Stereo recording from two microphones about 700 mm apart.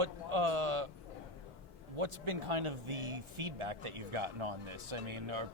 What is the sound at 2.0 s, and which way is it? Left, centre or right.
Speech, right.